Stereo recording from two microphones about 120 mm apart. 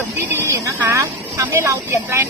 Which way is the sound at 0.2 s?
20° right (ahead or behind).